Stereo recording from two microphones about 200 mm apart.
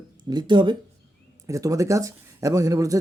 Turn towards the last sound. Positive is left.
turn(degrees=-15)  # may be behind; listen again after turning